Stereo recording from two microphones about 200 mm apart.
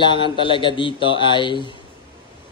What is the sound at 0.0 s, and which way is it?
A man's voice, 25° left (ahead or behind).